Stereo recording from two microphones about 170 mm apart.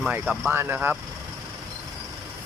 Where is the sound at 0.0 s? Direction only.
5° right (ahead or behind).